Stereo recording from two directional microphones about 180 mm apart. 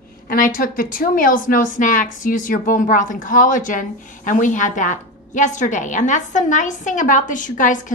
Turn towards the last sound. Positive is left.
turn(degrees=45)  # may be behind; listen again after turning